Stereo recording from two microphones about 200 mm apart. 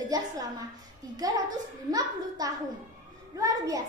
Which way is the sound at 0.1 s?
20° right (ahead or behind).